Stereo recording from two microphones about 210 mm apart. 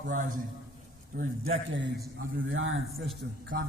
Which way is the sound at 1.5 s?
60° right (ahead or behind).